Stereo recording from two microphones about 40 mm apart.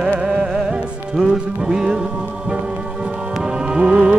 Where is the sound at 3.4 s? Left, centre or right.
Centre.